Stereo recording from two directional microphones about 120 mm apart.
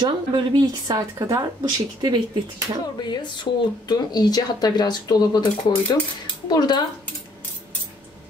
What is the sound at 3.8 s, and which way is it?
Speech, 35° left (ahead or behind).